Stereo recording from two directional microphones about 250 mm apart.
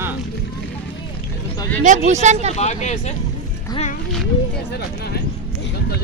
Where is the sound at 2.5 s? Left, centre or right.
Left.